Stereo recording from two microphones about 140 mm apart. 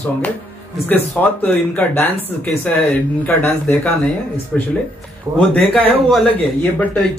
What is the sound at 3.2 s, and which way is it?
Speech, 10° left (ahead or behind).